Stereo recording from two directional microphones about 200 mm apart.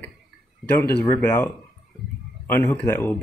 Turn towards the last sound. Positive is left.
turn(degrees=10)  # may be behind; listen again after turning